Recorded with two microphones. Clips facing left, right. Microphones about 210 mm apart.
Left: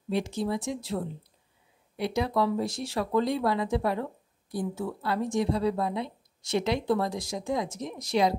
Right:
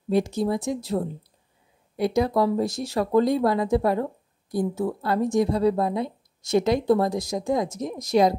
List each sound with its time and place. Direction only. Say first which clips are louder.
0.1 s speech: right 6 dB; 40° right (ahead or behind)